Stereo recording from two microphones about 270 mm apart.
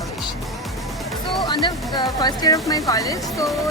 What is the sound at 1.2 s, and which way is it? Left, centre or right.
Speech, centre.